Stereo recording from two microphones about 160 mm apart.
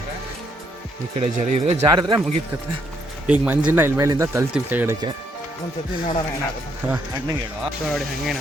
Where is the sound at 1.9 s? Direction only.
30° right (ahead or behind).